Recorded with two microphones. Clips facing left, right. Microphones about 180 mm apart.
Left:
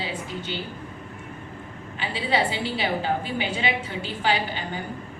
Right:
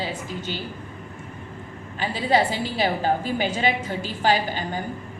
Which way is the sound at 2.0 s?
40° right (ahead or behind).